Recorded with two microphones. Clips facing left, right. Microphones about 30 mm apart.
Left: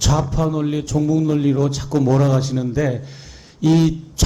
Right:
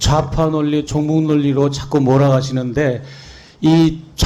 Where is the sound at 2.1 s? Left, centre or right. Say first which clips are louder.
Right 4 dB; right.